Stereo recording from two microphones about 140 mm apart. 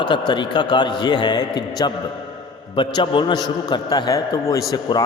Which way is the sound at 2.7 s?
35° left (ahead or behind).